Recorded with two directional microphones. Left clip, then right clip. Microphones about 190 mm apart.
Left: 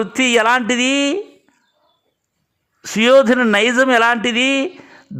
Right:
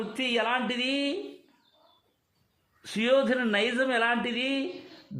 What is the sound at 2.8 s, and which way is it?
A man's voice, 45° left (ahead or behind).